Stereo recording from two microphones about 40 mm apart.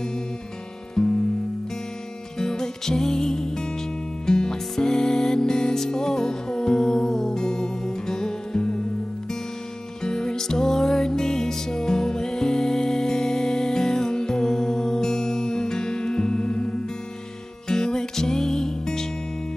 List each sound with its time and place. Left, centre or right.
1.0 s music: centre
2.3 s music: centre
10.0 s music: centre